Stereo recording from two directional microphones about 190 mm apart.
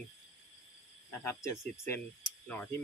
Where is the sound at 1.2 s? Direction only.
15° left (ahead or behind).